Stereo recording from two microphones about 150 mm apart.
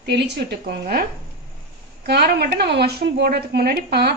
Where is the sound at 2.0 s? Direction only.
90° right.